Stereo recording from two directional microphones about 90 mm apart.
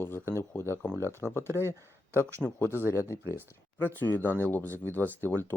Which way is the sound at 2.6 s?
25° left (ahead or behind).